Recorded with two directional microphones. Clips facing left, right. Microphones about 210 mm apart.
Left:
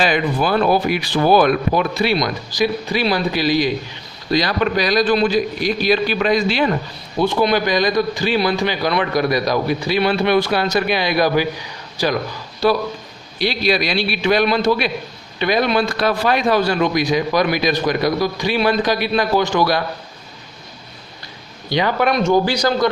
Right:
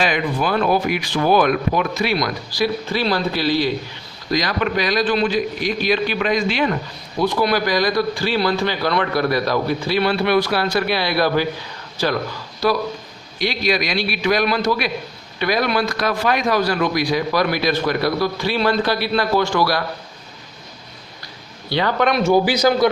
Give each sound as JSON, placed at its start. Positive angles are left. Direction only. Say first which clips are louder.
{"t": 0.0, "sound": "speech", "louder": "left 2 dB", "side_deg": 35}
{"t": 4.3, "sound": "a man's voice", "louder": "left 3 dB", "side_deg": 30}
{"t": 12.6, "sound": "a man's voice", "louder": "left 2 dB", "side_deg": 25}
{"t": 21.7, "sound": "a man's voice", "louder": "left 1 dB", "side_deg": 15}
{"t": 22.2, "sound": "a man's voice", "louder": "right 3 dB", "side_deg": -5}